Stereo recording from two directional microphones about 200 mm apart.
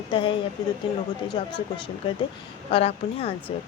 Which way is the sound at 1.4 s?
25° left (ahead or behind).